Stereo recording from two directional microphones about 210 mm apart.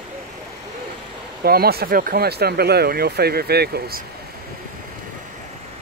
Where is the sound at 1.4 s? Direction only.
45° right (ahead or behind).